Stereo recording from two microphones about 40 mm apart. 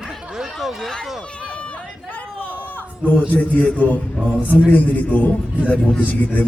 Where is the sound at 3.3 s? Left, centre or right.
Left.